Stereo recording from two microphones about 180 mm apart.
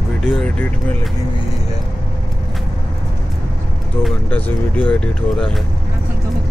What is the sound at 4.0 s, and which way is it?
Speech, 10° left (ahead or behind).